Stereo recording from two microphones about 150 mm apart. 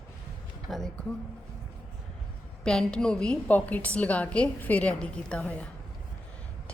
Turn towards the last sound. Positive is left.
turn(degrees=10)  # may be behind; listen again after turning